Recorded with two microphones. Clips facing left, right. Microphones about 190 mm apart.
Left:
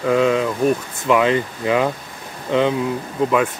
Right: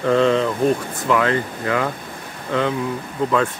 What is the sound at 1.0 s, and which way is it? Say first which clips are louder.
Speech: left 3 dB; 15° left (ahead or behind).